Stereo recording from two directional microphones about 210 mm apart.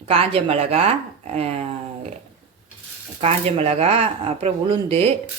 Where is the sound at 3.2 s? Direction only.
30° right (ahead or behind).